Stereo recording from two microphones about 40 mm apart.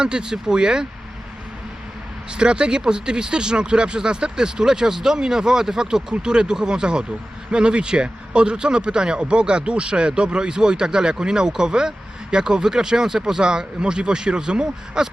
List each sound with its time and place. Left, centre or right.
0.0 s speech: right
2.3 s speech: right